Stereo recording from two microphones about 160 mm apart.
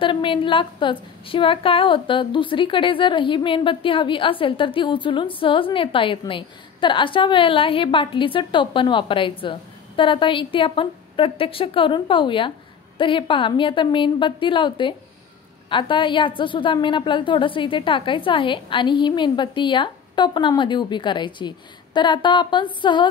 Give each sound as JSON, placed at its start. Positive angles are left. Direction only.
{"t": 0.0, "sound": "a woman's voice", "side_deg": 30}